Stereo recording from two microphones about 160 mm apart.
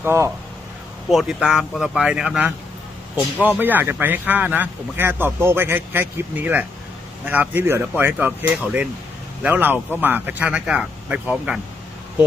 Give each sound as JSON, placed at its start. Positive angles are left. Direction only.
{"t": 0.0, "sound": "speech", "side_deg": -15}
{"t": 1.1, "sound": "speech", "side_deg": -5}